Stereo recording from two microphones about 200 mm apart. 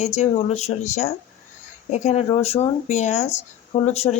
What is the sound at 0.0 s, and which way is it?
Speech, 35° left (ahead or behind).